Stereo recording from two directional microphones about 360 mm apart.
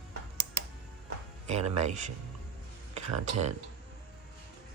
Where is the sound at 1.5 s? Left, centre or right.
Centre.